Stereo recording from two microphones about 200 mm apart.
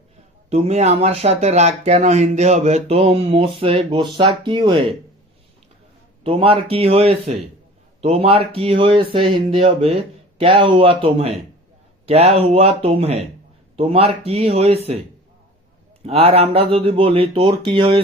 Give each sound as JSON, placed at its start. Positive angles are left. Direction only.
{"t": 0.5, "sound": "speech", "side_deg": -35}
{"t": 6.2, "sound": "speech", "side_deg": -25}
{"t": 16.0, "sound": "speech", "side_deg": -30}